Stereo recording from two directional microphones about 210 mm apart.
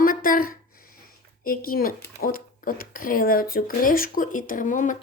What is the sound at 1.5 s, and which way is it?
Speech, 45° left (ahead or behind).